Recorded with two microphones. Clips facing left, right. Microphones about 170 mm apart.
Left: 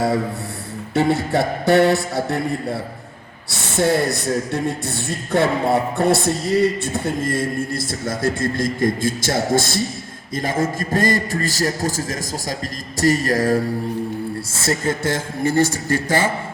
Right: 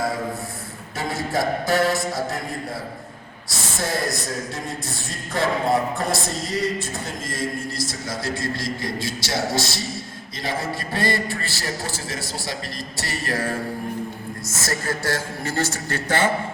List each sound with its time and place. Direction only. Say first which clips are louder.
0.9 s a sound: left 7 dB; 65° left (ahead or behind)
3.5 s a woman's voice: left 8 dB; 65° left (ahead or behind); by 12.5 s 45° left (ahead or behind)
13.0 s mantra: left 10 dB; 45° left (ahead or behind)
14.5 s a man's voice: left 5 dB; 25° left (ahead or behind); by 16.3 s 10° left (ahead or behind)